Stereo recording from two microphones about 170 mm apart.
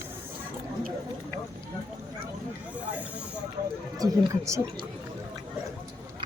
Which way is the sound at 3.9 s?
20° right (ahead or behind).